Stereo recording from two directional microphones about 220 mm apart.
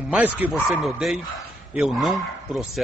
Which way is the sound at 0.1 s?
5° right (ahead or behind).